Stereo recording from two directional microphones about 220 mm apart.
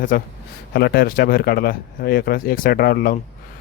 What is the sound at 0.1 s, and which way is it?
Speech, 40° left (ahead or behind).